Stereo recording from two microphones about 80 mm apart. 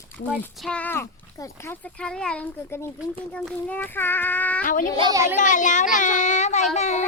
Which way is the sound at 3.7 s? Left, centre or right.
Left.